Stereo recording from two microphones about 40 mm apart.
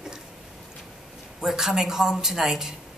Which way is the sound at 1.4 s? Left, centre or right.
Centre.